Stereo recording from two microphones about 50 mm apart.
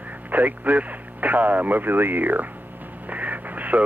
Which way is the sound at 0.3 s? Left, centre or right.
Right.